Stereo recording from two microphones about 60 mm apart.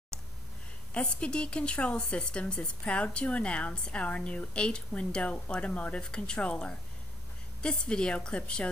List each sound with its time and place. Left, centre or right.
0.9 s a woman's voice: centre